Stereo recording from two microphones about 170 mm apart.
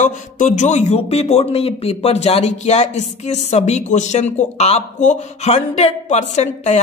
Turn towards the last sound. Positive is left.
turn(degrees=40)  # may be behind; listen again after turning